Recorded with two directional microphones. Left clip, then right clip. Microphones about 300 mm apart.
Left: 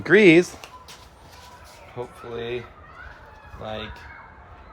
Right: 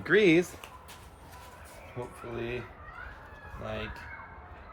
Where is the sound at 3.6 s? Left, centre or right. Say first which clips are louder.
Left 5 dB; centre.